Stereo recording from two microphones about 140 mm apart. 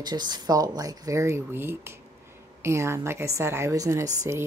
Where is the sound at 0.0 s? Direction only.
30° right (ahead or behind).